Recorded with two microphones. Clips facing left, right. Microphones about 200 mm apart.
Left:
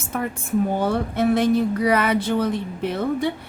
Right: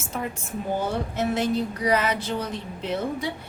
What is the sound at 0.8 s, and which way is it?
A woman's voice, 60° left (ahead or behind).